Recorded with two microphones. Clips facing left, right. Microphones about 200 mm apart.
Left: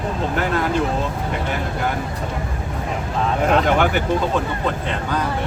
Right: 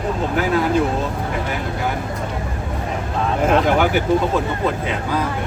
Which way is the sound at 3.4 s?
Centre (ahead or behind).